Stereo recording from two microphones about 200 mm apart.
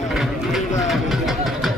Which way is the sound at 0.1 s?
Centre (ahead or behind).